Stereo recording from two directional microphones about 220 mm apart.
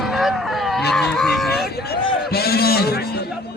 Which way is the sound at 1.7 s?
45° left (ahead or behind).